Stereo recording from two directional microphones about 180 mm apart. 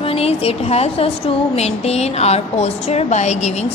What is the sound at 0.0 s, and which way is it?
A woman's voice, 35° left (ahead or behind).